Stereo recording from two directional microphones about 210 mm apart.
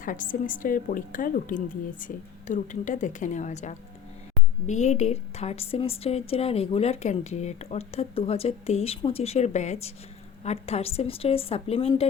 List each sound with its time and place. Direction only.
0.0 s a woman's voice: 40° left (ahead or behind)